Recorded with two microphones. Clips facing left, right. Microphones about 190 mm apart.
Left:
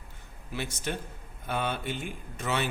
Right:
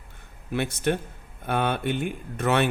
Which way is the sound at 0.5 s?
60° right (ahead or behind).